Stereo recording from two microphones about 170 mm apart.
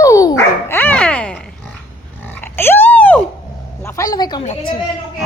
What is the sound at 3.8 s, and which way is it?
Speech, 20° left (ahead or behind).